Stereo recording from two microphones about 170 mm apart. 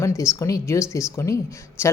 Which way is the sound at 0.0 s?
15° left (ahead or behind).